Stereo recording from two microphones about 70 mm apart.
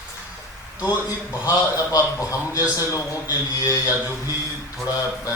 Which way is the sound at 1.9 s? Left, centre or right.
Left.